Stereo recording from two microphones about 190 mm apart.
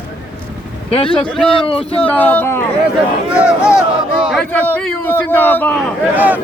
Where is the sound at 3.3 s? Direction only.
5° right (ahead or behind).